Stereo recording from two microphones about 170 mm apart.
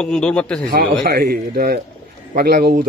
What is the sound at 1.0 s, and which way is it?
Speech, 60° right (ahead or behind).